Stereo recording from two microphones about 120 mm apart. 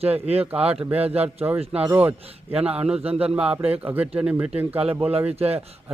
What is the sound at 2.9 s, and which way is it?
Speech, 55° right (ahead or behind).